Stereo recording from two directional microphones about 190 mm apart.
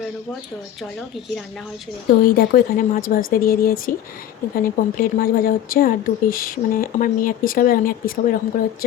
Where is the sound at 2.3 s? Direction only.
50° left (ahead or behind).